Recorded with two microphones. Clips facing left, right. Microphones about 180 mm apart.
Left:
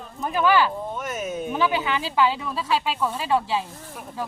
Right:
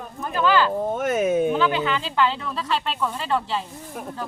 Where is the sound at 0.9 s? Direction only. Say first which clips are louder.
Right 8 dB; 55° right (ahead or behind).